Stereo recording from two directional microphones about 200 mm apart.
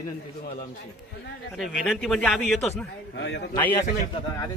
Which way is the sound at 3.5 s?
10° left (ahead or behind).